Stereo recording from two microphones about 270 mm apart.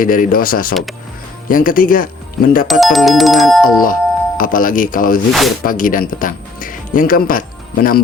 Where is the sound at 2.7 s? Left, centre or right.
Centre.